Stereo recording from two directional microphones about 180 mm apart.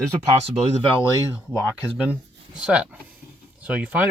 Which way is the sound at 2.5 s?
5° right (ahead or behind).